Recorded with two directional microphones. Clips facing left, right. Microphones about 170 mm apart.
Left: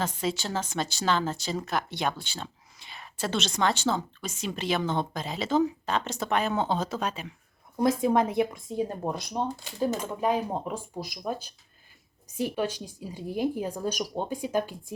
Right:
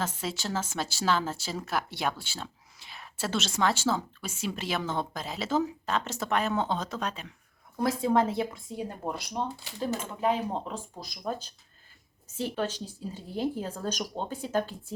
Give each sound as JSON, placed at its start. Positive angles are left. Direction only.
{"t": 0.0, "sound": "speech", "side_deg": -5}
{"t": 7.8, "sound": "a woman's voice", "side_deg": 20}